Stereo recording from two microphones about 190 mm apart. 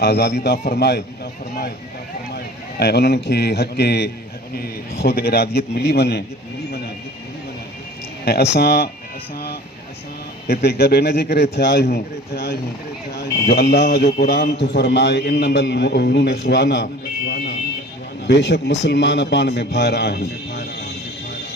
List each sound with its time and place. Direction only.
0.0 s speech: 55° left (ahead or behind)
6.7 s a sound: 55° left (ahead or behind)
8.2 s speech: 55° left (ahead or behind)
10.4 s a man's voice: 60° left (ahead or behind)